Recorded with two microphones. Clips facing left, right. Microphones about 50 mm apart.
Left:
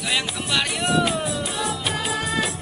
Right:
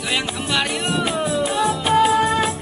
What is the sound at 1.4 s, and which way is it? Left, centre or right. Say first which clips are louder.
Music: right 7 dB; right.